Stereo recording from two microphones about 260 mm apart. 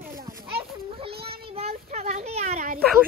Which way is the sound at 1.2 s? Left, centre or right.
Right.